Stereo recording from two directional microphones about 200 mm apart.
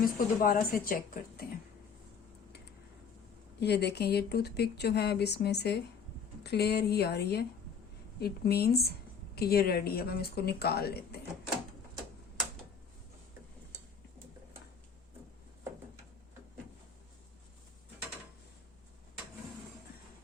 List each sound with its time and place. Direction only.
0.0 s a woman's voice: 45° left (ahead or behind)
3.6 s a woman's voice: 55° left (ahead or behind)